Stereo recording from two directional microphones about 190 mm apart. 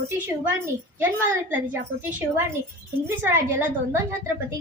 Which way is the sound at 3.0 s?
10° right (ahead or behind).